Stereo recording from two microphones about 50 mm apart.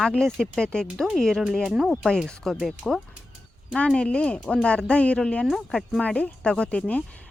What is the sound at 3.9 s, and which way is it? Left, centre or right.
Speech, centre.